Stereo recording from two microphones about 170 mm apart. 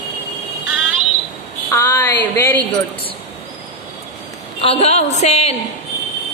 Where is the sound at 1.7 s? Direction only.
15° left (ahead or behind).